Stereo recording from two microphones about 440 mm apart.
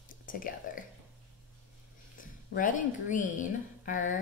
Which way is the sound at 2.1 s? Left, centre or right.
Centre.